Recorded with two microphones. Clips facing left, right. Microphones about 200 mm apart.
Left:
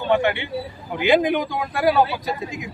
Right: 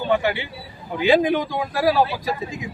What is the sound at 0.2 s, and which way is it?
Speech, 5° right (ahead or behind).